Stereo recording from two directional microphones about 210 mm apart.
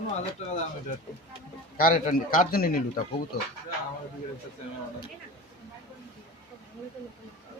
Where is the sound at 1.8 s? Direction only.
40° left (ahead or behind).